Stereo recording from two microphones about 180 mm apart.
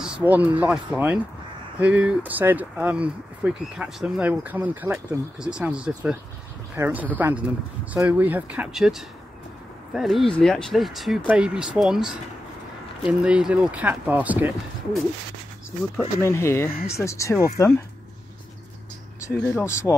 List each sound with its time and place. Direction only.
0.0 s speech: 5° right (ahead or behind)
16.2 s speech: 15° left (ahead or behind)
19.2 s speech: 15° left (ahead or behind)